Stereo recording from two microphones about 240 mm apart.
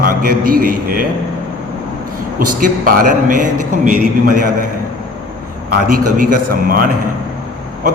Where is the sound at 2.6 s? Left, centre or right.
Right.